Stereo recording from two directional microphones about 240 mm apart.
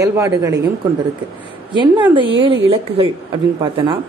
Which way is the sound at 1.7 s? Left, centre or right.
Centre.